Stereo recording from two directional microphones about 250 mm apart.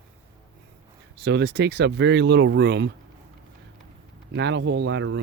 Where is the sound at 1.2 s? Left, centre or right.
Right.